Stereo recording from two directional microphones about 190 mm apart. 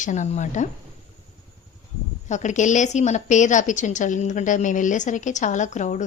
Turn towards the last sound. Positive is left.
turn(degrees=40)  # may be behind; listen again after turning